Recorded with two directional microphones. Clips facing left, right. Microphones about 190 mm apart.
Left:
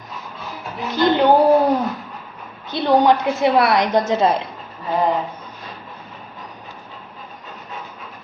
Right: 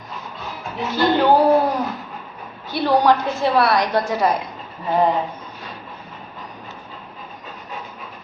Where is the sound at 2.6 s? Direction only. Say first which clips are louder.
Left 1 dB; 20° left (ahead or behind).